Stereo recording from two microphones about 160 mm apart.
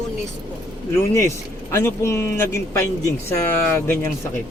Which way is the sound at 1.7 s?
15° left (ahead or behind).